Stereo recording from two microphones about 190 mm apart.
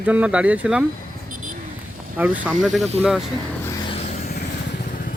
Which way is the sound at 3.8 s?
30° left (ahead or behind).